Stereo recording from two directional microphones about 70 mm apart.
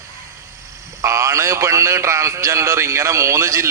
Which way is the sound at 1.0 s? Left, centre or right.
Right.